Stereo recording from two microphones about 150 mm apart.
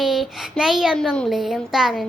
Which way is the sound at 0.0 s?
Centre (ahead or behind).